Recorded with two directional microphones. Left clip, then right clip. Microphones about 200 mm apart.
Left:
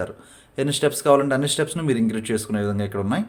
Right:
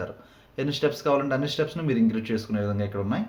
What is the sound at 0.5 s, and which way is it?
A man's voice, 35° left (ahead or behind).